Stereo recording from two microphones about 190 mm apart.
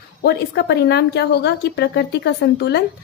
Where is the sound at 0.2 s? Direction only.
60° left (ahead or behind).